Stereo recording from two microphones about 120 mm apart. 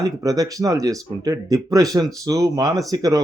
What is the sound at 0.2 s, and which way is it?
Speech, 30° right (ahead or behind).